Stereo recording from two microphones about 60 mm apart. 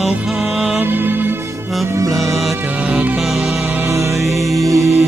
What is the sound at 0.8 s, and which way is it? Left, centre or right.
Music, right.